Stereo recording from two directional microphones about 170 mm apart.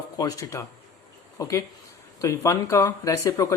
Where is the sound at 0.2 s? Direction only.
20° left (ahead or behind).